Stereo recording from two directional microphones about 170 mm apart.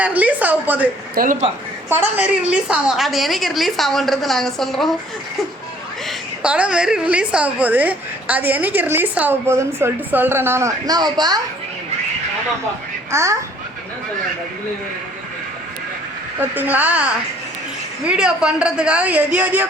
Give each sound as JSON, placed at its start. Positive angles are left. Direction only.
{"t": 0.0, "sound": "a woman's voice", "side_deg": -10}
{"t": 1.1, "sound": "speech", "side_deg": -55}
{"t": 1.9, "sound": "a woman's voice", "side_deg": -10}
{"t": 6.1, "sound": "a woman's voice", "side_deg": -5}
{"t": 13.1, "sound": "a child's voice", "side_deg": -15}
{"t": 16.4, "sound": "a woman's voice", "side_deg": -10}